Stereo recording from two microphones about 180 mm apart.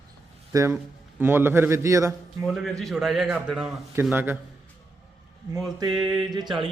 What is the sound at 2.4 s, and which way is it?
A man's voice, centre (ahead or behind).